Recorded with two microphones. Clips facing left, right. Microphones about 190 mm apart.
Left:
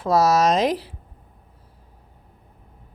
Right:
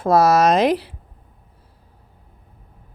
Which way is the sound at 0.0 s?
55° right (ahead or behind).